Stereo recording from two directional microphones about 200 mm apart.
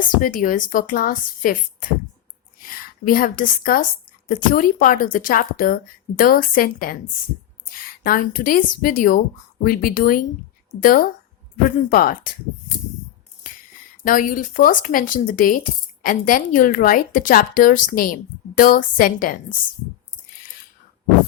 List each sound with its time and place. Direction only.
0.2 s a woman's voice: 45° left (ahead or behind)
2.6 s a woman's voice: 45° left (ahead or behind)
8.0 s a woman's voice: 45° left (ahead or behind)
14.0 s a woman's voice: 45° left (ahead or behind)